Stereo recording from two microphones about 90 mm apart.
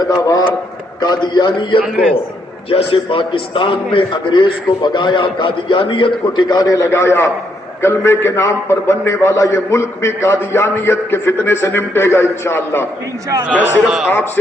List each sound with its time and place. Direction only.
0.0 s a sound: 45° left (ahead or behind)
1.0 s a man's voice: 55° left (ahead or behind)
2.6 s a man's voice: 90° left; by 12.9 s 25° left (ahead or behind)
13.6 s a man's voice: 15° right (ahead or behind)